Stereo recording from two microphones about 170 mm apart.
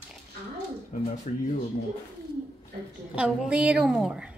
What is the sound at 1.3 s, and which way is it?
Speech, 45° left (ahead or behind).